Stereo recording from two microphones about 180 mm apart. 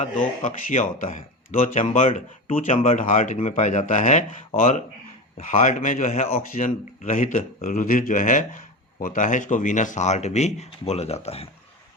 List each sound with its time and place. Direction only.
0.4 s speech: 45° left (ahead or behind)